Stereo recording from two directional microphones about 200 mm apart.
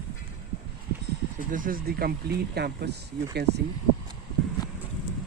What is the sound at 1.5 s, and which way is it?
Speech, 45° right (ahead or behind).